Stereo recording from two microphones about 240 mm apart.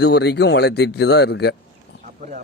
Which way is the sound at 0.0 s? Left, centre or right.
Left.